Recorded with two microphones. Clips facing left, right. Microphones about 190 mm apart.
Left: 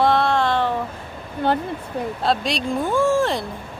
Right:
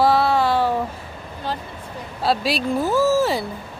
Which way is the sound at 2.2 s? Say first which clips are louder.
Right 3 dB; 5° right (ahead or behind).